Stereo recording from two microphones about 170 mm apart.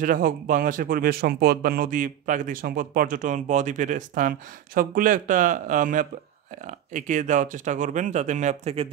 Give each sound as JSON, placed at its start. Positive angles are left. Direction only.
{"t": 0.0, "sound": "speech", "side_deg": -55}